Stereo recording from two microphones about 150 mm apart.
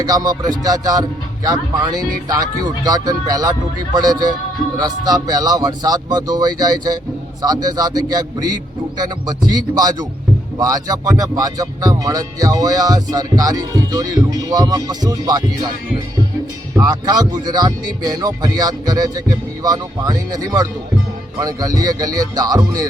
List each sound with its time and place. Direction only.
0.0 s music: 25° right (ahead or behind)
16.7 s music: 25° right (ahead or behind)